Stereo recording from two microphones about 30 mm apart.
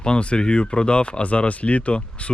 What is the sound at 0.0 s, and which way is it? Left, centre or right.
Speech, left.